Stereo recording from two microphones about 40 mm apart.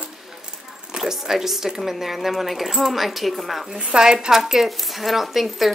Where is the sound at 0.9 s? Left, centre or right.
Centre.